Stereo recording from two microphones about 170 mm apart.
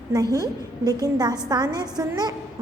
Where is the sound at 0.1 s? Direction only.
20° right (ahead or behind).